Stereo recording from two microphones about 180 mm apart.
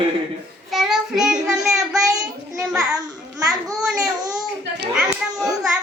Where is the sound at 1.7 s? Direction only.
20° right (ahead or behind).